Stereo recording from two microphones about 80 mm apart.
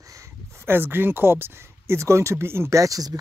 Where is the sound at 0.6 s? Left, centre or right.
Right.